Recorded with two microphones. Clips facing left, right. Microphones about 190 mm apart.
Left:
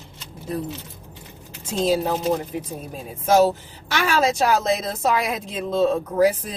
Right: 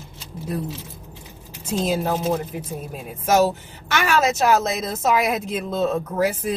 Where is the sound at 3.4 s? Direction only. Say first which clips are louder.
Left 2 dB; 30° left (ahead or behind).